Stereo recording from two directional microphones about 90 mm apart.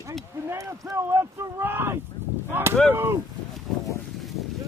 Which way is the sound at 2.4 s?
25° right (ahead or behind).